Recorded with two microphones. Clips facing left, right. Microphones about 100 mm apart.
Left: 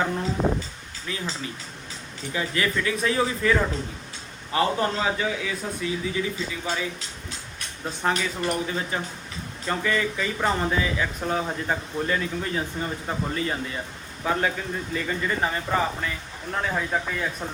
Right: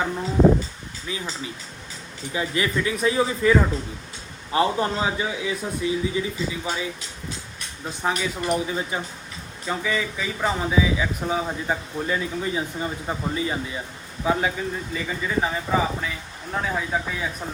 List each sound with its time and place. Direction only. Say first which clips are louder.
0.0 s a sound: right 5 dB; 5° right (ahead or behind)
1.0 s speech: even; 15° right (ahead or behind)
2.3 s a man's voice: right 2 dB; 15° right (ahead or behind)
8.0 s speech: right 1 dB; 5° right (ahead or behind)